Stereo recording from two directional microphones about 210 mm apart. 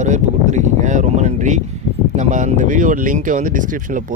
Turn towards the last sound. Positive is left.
turn(degrees=-40)  # may be behind; listen again after turning